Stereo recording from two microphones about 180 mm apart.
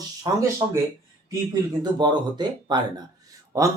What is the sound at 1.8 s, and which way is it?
A man's voice, 25° right (ahead or behind).